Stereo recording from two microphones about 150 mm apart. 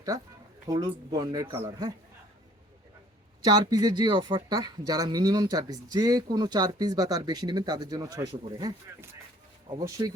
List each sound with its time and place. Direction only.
0.7 s speech: 25° right (ahead or behind)
3.4 s speech: 25° right (ahead or behind)